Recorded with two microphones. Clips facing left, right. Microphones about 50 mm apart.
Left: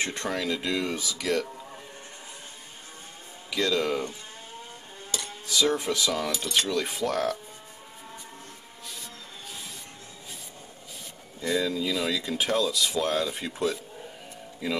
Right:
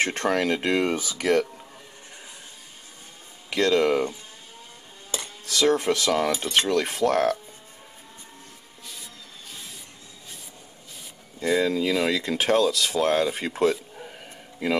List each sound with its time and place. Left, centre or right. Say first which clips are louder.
0.0 s speech: right 6 dB; right
3.5 s speech: right 5 dB; right
5.5 s speech: right 4 dB; right
6.7 s speech: right 5 dB; right
11.6 s speech: right 5 dB; right